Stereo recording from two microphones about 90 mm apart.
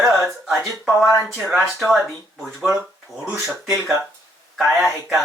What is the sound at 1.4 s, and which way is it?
Speech, centre (ahead or behind).